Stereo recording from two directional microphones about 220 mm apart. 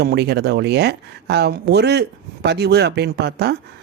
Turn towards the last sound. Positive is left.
turn(degrees=-50)  # may be behind; listen again after turning